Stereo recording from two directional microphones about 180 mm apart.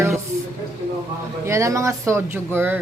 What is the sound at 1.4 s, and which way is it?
Speech, 15° right (ahead or behind).